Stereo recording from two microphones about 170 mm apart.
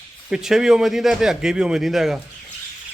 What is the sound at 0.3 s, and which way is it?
A man's voice, 5° right (ahead or behind).